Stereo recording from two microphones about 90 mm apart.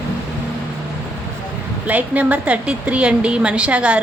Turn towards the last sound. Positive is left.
turn(degrees=-10)  # may be behind; listen again after turning